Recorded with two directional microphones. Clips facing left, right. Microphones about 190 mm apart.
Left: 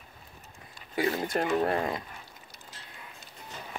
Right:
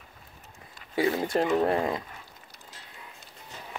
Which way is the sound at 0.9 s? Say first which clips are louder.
Right 3 dB; 25° right (ahead or behind).